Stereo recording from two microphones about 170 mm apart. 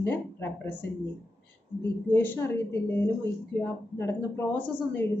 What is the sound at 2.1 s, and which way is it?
A woman's voice, 10° left (ahead or behind).